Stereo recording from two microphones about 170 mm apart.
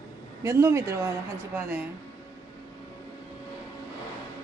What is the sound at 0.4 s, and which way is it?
Speech, 15° right (ahead or behind).